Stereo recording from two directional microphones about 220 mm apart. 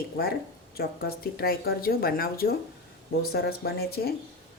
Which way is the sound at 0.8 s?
45° left (ahead or behind).